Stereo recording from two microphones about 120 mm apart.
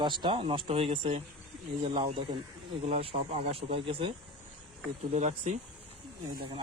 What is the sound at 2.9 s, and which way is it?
Speech, 65° right (ahead or behind).